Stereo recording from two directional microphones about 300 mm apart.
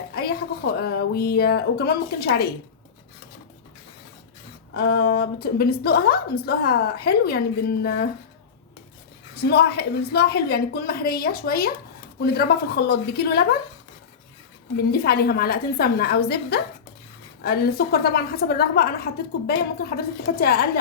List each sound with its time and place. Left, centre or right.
0.1 s a woman's voice: left
4.7 s a woman's voice: left
9.3 s a woman's voice: left
14.8 s a woman's voice: left